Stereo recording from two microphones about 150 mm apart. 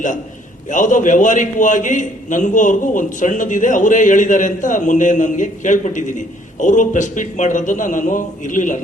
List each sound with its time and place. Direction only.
0.7 s a man's voice: 60° left (ahead or behind)